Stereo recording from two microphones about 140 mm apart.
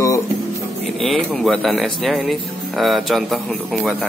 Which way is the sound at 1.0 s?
Centre (ahead or behind).